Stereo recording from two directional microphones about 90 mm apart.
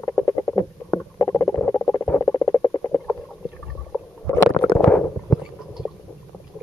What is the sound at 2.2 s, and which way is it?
Rodents, 30° left (ahead or behind).